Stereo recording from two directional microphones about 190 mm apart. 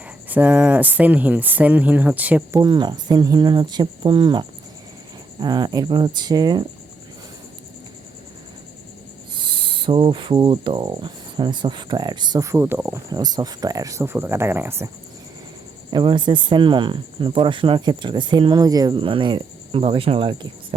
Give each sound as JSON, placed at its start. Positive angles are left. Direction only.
{"t": 0.0, "sound": "speech", "side_deg": -5}
{"t": 2.6, "sound": "speech", "side_deg": -20}
{"t": 9.4, "sound": "speech", "side_deg": -25}
{"t": 15.9, "sound": "speech", "side_deg": -25}